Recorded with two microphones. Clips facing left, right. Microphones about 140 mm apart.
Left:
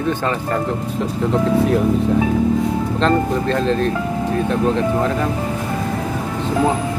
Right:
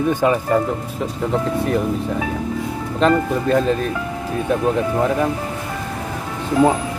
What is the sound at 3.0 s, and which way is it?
Speech, 10° right (ahead or behind).